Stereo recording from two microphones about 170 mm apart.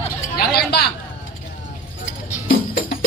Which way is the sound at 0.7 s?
70° left (ahead or behind).